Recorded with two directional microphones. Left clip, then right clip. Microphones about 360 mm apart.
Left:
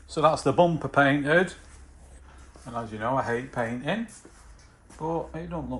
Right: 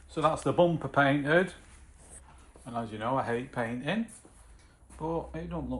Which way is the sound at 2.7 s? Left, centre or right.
Centre.